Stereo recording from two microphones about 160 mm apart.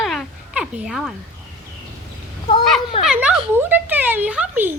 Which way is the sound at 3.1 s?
5° right (ahead or behind).